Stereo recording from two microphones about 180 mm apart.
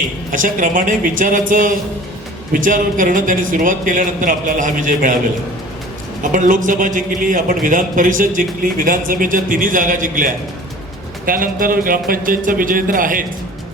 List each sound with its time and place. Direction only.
0.3 s a man's voice: 45° right (ahead or behind)
6.3 s a man's voice: 45° right (ahead or behind)
11.3 s a man's voice: 50° right (ahead or behind)